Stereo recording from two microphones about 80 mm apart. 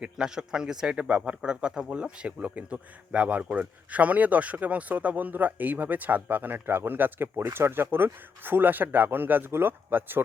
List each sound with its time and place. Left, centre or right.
0.0 s speech: centre; by 10.2 s right